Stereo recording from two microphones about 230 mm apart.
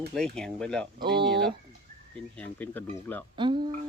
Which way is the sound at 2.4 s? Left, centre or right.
Centre.